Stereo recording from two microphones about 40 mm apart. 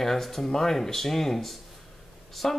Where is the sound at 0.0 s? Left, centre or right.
Centre.